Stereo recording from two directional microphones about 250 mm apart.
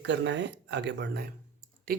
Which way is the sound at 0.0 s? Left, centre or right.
Right.